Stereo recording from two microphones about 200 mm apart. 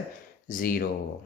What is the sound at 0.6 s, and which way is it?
Speech, 45° left (ahead or behind).